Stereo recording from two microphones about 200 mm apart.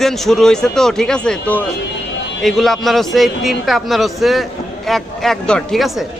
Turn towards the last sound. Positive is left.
turn(degrees=0)  # may be behind; listen again after turning